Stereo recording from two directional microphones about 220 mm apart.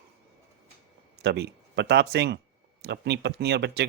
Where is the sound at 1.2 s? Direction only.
50° right (ahead or behind).